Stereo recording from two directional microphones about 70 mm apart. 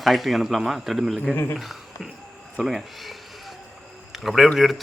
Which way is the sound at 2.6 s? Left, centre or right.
Centre.